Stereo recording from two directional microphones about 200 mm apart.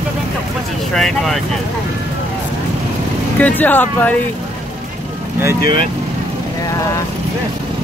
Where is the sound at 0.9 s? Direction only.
Centre (ahead or behind).